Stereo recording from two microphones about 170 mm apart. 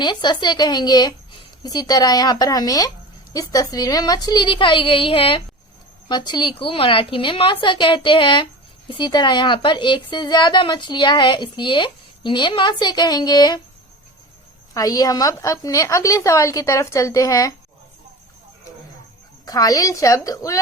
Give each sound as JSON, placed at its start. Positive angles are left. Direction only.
{"t": 0.0, "sound": "a woman's voice", "side_deg": 25}
{"t": 14.7, "sound": "a woman's voice", "side_deg": 20}
{"t": 19.5, "sound": "a woman's voice", "side_deg": 20}